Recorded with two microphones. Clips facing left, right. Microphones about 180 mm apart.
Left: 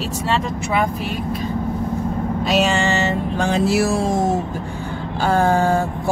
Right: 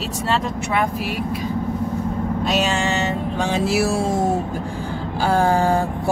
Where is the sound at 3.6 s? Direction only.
10° right (ahead or behind).